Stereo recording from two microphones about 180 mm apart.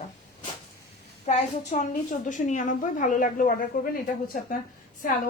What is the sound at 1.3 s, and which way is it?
A woman's voice, 40° left (ahead or behind).